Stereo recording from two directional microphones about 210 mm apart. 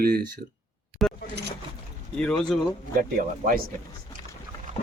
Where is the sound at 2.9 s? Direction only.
40° right (ahead or behind).